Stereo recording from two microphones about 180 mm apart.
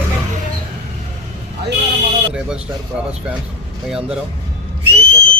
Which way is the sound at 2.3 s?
5° right (ahead or behind).